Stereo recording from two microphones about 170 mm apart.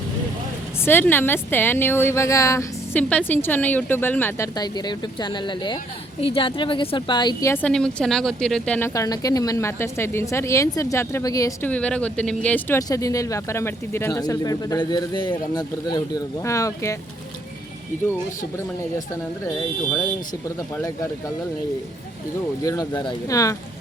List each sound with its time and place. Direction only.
0.9 s speech: 10° left (ahead or behind)
4.5 s a woman's voice: 25° left (ahead or behind)
7.5 s speech: 5° left (ahead or behind)
8.9 s speech: 20° left (ahead or behind)
11.7 s speech: 5° left (ahead or behind)
18.1 s speech: 15° left (ahead or behind)
22.6 s a woman's voice: 20° left (ahead or behind)